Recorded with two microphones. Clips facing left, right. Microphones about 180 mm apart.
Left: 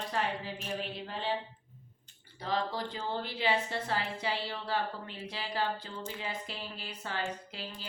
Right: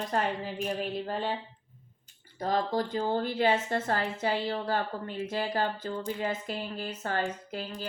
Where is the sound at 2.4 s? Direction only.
45° right (ahead or behind).